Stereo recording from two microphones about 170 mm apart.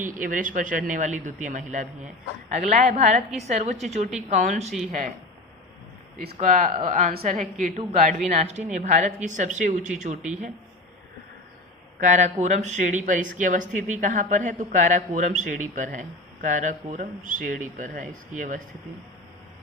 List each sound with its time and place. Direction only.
0.0 s a woman's voice: 50° right (ahead or behind)
6.4 s speech: 45° right (ahead or behind)
11.9 s speech: 45° right (ahead or behind)